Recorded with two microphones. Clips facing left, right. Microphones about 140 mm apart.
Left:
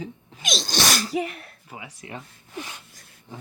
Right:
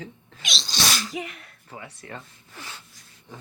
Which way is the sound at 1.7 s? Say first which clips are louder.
Left 1 dB; 10° left (ahead or behind).